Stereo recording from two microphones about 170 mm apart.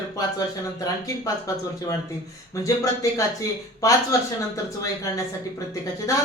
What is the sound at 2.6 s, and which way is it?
Speech, 20° left (ahead or behind).